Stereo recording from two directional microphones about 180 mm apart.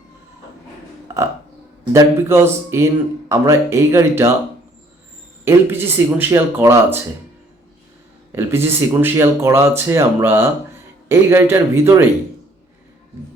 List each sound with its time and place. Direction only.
1.0 s burping: 15° right (ahead or behind)
1.9 s speech: 15° right (ahead or behind)
5.5 s speech: 10° right (ahead or behind)
8.4 s speech: 15° right (ahead or behind)